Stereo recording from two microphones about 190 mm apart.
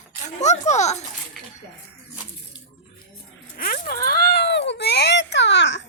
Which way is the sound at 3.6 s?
45° left (ahead or behind).